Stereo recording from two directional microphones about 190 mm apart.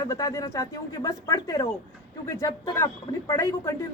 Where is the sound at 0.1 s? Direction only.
15° left (ahead or behind).